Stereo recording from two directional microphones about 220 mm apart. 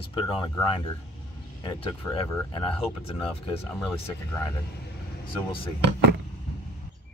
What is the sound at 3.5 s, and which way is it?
Speech, 25° left (ahead or behind).